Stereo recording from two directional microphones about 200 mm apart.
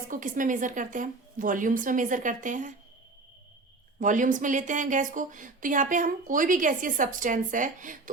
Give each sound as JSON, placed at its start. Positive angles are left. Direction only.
{"t": 0.1, "sound": "speech", "side_deg": -40}
{"t": 4.0, "sound": "speech", "side_deg": -40}